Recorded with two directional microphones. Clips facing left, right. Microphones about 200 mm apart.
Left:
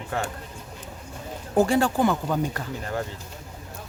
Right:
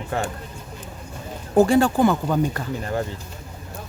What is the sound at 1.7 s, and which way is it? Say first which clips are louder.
Speech: right 4 dB; 45° right (ahead or behind).